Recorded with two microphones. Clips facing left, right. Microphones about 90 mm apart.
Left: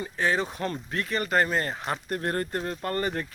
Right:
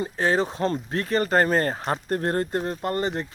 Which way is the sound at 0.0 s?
35° right (ahead or behind).